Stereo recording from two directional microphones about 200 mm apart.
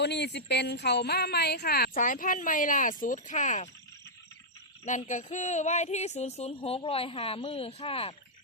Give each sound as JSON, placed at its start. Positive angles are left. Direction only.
{"t": 0.0, "sound": "a woman's voice", "side_deg": 60}
{"t": 4.9, "sound": "speech", "side_deg": 40}